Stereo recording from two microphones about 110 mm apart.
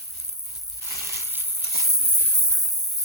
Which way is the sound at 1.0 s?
25° right (ahead or behind).